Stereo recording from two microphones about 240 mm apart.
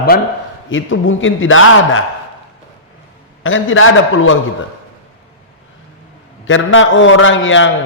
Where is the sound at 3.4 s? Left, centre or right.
Left.